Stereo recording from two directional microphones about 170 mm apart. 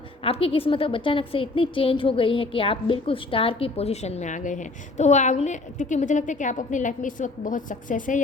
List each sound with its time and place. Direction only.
0.3 s a woman's voice: 35° left (ahead or behind); by 8.2 s 50° left (ahead or behind)